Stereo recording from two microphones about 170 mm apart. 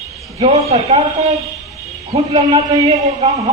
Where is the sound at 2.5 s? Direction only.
20° right (ahead or behind).